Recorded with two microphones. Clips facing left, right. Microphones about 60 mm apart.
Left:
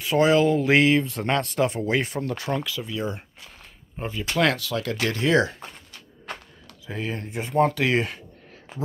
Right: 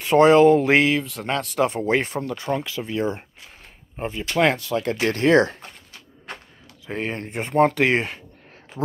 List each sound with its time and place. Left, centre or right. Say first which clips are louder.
0.1 s speech: right 6 dB; right
0.6 s speech: right 1 dB; centre
0.9 s speech: left 2 dB; centre
1.6 s speech: right 2 dB; right
3.9 s speech: right 2 dB; right
5.1 s speech: right 4 dB; right
6.9 s speech: right 3 dB; right
7.9 s speech: right 1 dB; right